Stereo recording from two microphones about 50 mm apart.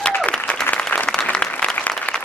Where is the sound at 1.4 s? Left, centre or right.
Centre.